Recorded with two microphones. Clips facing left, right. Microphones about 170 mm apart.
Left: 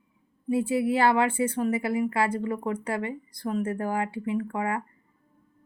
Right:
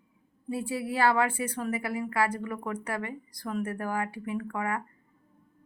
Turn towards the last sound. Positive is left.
turn(degrees=25)  # may be behind; listen again after turning